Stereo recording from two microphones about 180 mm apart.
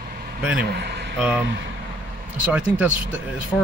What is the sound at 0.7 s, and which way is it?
Speech, 70° right (ahead or behind).